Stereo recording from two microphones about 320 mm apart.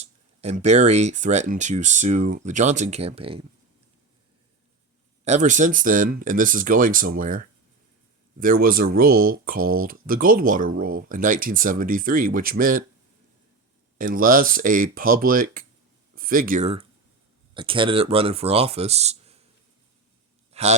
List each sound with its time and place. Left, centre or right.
0.0 s speech: right
5.2 s speech: right
14.0 s speech: right
20.5 s a sound: centre